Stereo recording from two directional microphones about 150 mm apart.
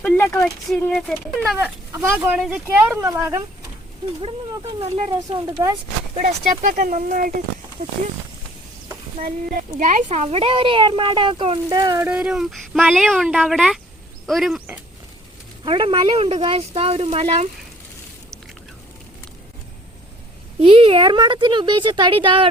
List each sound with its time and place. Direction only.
0.0 s speech: 15° left (ahead or behind)
0.4 s speech: centre (ahead or behind)
1.5 s speech: 20° right (ahead or behind)
4.7 s speech: 40° right (ahead or behind)
5.5 s speech: 20° right (ahead or behind)
6.1 s speech: 55° right (ahead or behind)
9.1 s speech: 60° right (ahead or behind); by 12.0 s 25° right (ahead or behind)
12.0 s speech: 5° right (ahead or behind)
15.6 s speech: 35° right (ahead or behind)
20.6 s speech: 40° right (ahead or behind)